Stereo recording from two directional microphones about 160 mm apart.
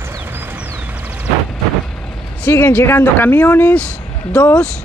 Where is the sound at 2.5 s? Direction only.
15° left (ahead or behind).